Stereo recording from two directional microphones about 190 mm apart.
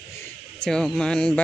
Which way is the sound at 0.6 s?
5° left (ahead or behind).